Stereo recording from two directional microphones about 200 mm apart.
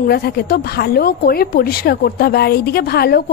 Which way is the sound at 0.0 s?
50° left (ahead or behind).